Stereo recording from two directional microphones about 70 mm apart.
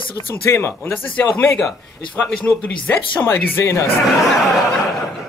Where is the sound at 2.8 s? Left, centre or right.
Left.